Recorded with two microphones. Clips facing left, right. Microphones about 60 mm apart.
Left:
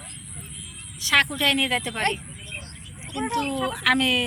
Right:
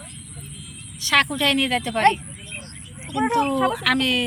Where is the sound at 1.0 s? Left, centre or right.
Centre.